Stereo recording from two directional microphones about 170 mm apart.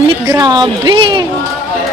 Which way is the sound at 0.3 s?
25° right (ahead or behind).